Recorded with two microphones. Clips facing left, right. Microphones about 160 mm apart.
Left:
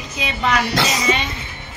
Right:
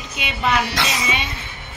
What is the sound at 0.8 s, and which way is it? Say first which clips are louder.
Speech: left 3 dB; 40° left (ahead or behind).